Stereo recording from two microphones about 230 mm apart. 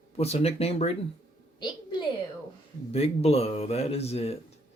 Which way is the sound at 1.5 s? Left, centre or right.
Centre.